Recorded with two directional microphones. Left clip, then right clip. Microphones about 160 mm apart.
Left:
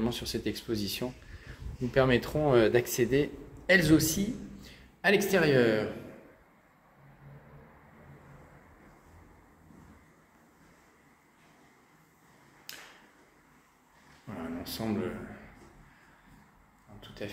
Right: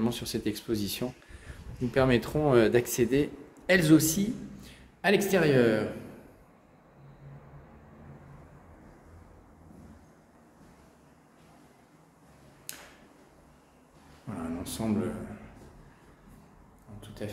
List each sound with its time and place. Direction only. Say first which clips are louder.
0.0 s speech: right 1 dB; 25° right (ahead or behind)
12.7 s tick-tock: even; 25° right (ahead or behind)
14.3 s a sound: right 2 dB; 20° right (ahead or behind)
17.2 s speech: right 1 dB; 10° right (ahead or behind)